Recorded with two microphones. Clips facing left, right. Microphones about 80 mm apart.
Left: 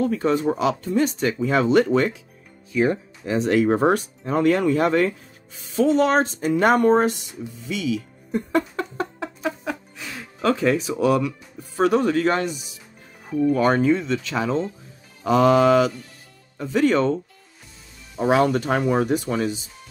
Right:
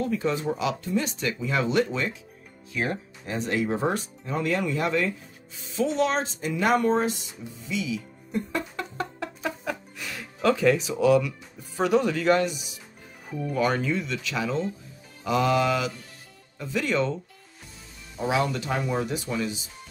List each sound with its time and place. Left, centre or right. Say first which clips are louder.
0.0 s speech: left 6 dB; left
3.3 s speech: left 8 dB; left
7.6 s speech: left 4 dB; left
8.7 s a sound: left 5 dB; left
9.4 s music: left 4 dB; centre
10.4 s speech: left 1 dB; left
13.6 s speech: left 3 dB; left
18.1 s speech: left 7 dB; left